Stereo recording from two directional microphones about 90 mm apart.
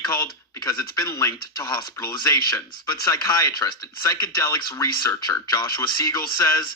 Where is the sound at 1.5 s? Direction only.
50° left (ahead or behind).